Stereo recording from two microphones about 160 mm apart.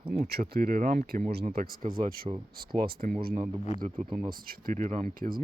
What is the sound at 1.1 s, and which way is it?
Speech, 65° right (ahead or behind).